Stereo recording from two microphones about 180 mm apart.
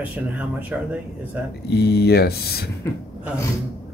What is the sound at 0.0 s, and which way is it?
Speech, 10° right (ahead or behind).